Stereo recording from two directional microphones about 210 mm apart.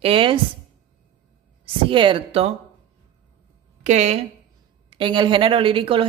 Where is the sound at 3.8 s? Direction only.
35° right (ahead or behind).